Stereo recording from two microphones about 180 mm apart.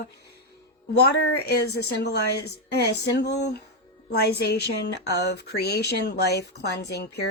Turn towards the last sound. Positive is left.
turn(degrees=65)  # may be behind; listen again after turning